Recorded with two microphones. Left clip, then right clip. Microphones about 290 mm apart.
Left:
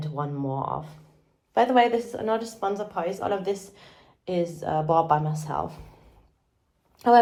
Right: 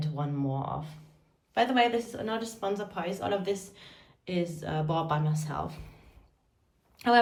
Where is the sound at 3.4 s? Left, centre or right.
Left.